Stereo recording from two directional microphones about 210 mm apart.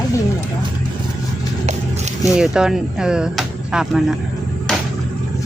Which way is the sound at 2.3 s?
5° right (ahead or behind).